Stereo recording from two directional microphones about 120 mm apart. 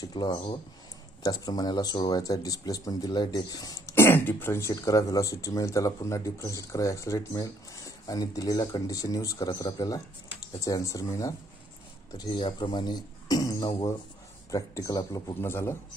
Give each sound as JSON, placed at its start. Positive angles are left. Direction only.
{"t": 0.0, "sound": "speech", "side_deg": 35}
{"t": 3.9, "sound": "speech", "side_deg": 20}
{"t": 12.1, "sound": "speech", "side_deg": 40}
{"t": 15.4, "sound": "speech", "side_deg": 20}